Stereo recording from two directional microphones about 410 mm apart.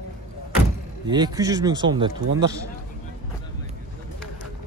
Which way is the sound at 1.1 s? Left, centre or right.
Centre.